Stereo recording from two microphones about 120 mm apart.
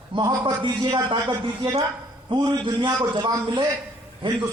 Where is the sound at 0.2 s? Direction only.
40° right (ahead or behind).